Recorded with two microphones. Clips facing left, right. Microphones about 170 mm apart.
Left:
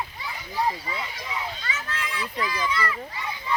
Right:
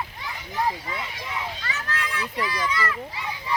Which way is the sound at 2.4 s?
5° right (ahead or behind).